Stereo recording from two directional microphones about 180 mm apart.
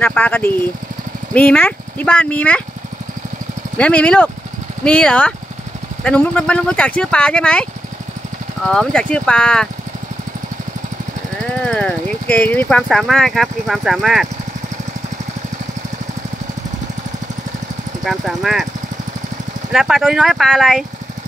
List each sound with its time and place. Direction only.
0.0 s speech: 10° left (ahead or behind)
3.7 s speech: 5° left (ahead or behind)
8.6 s speech: 5° left (ahead or behind)
11.6 s speech: 5° left (ahead or behind)
18.0 s speech: centre (ahead or behind)
19.7 s speech: centre (ahead or behind)